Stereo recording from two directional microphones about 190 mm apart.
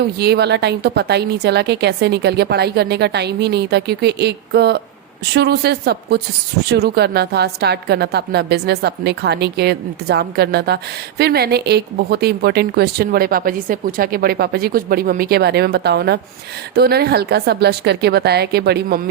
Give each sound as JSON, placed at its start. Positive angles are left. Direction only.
{"t": 0.2, "sound": "a woman's voice", "side_deg": -60}